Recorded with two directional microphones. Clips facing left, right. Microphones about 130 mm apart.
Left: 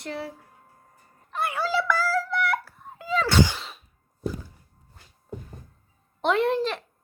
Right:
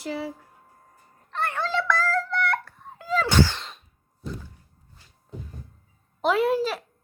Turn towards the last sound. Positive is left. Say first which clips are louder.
# right 1 dB
turn(degrees=-5)  # may be behind; listen again after turning